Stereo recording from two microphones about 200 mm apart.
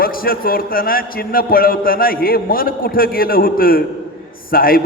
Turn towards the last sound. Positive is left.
turn(degrees=45)  # may be behind; listen again after turning